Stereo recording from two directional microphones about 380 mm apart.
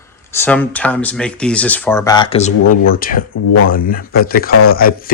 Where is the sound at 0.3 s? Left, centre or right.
Centre.